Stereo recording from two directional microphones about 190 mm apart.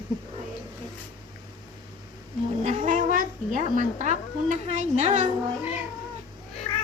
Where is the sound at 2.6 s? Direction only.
40° right (ahead or behind).